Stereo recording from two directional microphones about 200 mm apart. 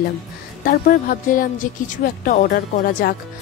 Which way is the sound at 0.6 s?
45° left (ahead or behind).